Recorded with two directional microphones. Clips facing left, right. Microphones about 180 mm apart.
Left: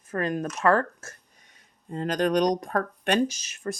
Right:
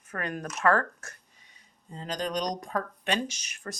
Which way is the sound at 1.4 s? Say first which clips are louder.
Left 2 dB; 50° left (ahead or behind).